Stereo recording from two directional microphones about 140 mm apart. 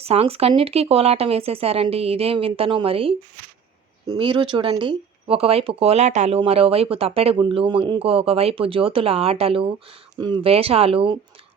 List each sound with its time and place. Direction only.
0.0 s speech: 45° right (ahead or behind)
4.2 s speech: 35° right (ahead or behind)